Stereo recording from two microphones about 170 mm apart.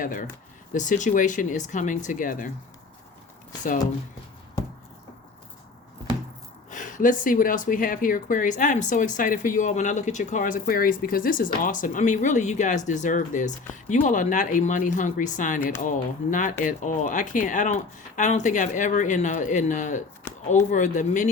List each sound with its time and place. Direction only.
0.0 s speech: 50° left (ahead or behind)
6.7 s speech: 50° left (ahead or behind)